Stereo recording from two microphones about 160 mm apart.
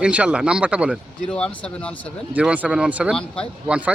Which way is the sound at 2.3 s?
10° right (ahead or behind).